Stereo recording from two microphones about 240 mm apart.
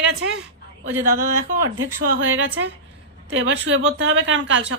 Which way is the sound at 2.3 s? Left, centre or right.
Right.